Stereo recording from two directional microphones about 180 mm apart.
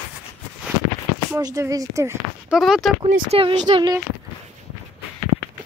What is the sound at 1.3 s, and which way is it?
Speech, 20° right (ahead or behind).